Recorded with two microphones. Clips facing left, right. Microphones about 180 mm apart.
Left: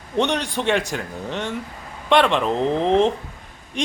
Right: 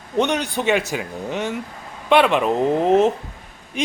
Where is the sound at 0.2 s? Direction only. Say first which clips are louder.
Right 1 dB; centre (ahead or behind).